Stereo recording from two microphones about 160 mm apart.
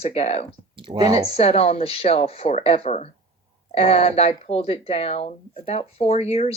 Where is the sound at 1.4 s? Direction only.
40° left (ahead or behind).